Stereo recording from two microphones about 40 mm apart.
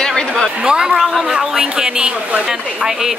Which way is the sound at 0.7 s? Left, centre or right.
Right.